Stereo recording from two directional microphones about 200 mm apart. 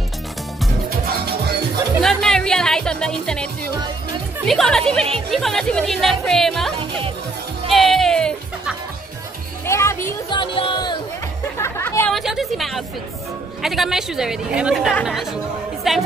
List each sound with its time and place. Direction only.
2.0 s music: centre (ahead or behind)
4.5 s speech: 5° left (ahead or behind)
7.7 s speech: centre (ahead or behind)
9.7 s music: 15° left (ahead or behind)
10.4 s music: 25° left (ahead or behind)
11.5 s chatter: 15° left (ahead or behind)
12.2 s speech: centre (ahead or behind)